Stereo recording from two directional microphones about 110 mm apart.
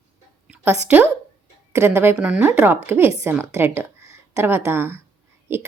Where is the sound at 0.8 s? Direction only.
15° right (ahead or behind).